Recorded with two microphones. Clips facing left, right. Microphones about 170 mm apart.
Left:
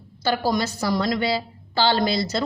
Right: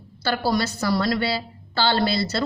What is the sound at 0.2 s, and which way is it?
A woman's voice, 15° left (ahead or behind).